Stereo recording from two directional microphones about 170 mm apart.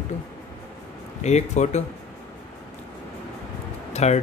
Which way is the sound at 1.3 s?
40° left (ahead or behind).